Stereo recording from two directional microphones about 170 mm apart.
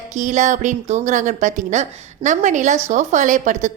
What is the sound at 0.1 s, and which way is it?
A woman's voice, 45° right (ahead or behind).